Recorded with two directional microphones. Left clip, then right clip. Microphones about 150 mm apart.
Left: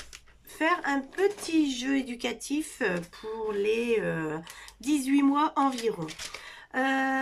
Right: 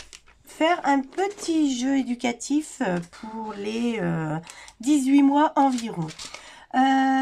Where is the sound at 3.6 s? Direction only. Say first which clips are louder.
Left 1 dB; 50° right (ahead or behind).